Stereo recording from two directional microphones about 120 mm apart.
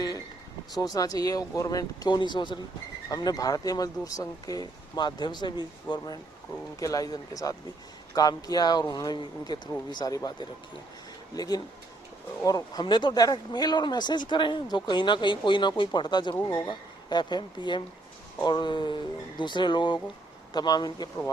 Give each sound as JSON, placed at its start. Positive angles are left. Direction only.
{"t": 0.9, "sound": "speech", "side_deg": 30}
{"t": 11.3, "sound": "speech", "side_deg": 35}